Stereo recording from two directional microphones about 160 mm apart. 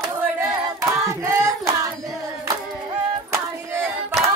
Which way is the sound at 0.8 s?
20° right (ahead or behind).